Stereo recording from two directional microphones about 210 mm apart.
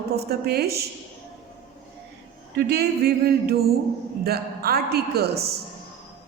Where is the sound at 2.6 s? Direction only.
50° right (ahead or behind).